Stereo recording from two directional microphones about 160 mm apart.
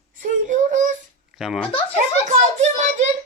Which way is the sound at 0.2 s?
50° right (ahead or behind).